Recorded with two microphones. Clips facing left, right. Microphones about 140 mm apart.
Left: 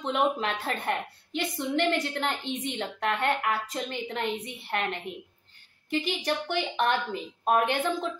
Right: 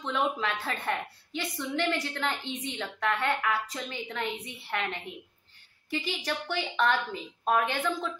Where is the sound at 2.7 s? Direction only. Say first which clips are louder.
Right 1 dB; 25° left (ahead or behind).